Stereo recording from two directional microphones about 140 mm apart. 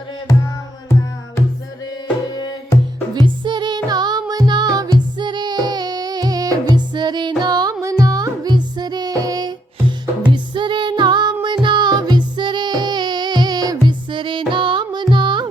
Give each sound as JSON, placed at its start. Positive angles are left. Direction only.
{"t": 3.2, "sound": "music", "side_deg": -35}